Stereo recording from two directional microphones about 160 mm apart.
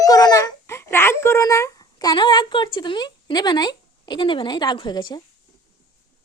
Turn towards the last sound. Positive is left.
turn(degrees=25)  # may be behind; listen again after turning